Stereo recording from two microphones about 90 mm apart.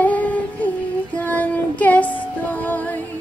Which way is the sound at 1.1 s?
15° left (ahead or behind).